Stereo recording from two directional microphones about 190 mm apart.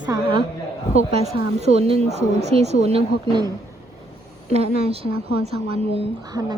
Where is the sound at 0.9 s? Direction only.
35° right (ahead or behind).